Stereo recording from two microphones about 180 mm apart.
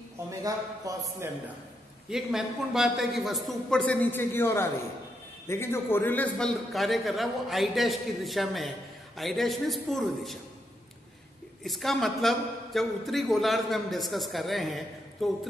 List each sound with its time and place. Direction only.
0.4 s a man's voice: 20° right (ahead or behind)
2.0 s a man's voice: centre (ahead or behind)
11.6 s a man's voice: centre (ahead or behind)